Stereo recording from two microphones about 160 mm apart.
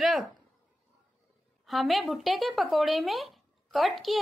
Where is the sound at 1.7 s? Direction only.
Centre (ahead or behind).